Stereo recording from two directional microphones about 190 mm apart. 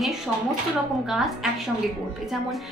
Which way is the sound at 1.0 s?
Centre (ahead or behind).